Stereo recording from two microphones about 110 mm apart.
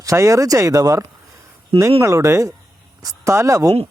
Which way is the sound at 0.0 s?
30° right (ahead or behind).